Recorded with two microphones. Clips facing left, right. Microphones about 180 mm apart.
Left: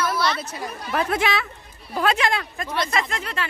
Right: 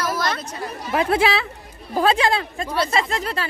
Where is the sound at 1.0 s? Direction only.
30° right (ahead or behind).